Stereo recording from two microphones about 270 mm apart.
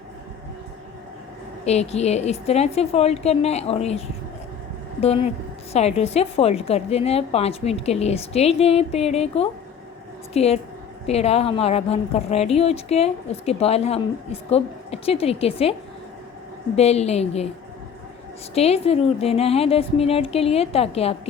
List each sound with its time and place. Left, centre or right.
1.6 s a woman's voice: left
16.7 s a woman's voice: left
18.5 s a woman's voice: left